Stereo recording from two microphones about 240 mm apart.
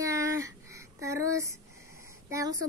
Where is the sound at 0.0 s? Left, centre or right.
Centre.